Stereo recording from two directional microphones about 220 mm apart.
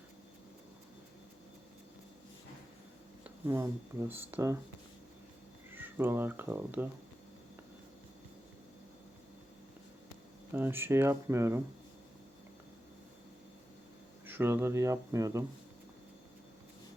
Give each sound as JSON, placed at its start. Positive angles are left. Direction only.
{"t": 3.2, "sound": "a sound", "side_deg": -10}
{"t": 4.1, "sound": "speech", "side_deg": -10}
{"t": 5.7, "sound": "speech", "side_deg": -10}
{"t": 10.5, "sound": "speech", "side_deg": -10}
{"t": 14.3, "sound": "speech", "side_deg": -10}